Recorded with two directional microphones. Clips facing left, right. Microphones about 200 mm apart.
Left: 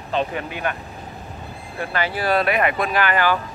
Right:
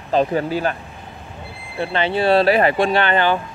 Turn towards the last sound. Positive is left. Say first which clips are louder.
# right 3 dB
turn(degrees=-25)  # may be behind; listen again after turning